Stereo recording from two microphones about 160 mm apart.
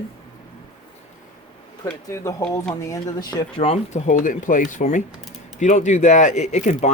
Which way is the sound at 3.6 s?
45° left (ahead or behind).